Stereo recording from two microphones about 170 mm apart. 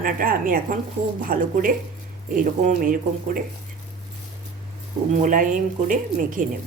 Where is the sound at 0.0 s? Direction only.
55° right (ahead or behind).